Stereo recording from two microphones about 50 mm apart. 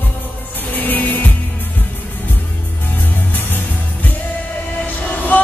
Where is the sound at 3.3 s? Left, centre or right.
Left.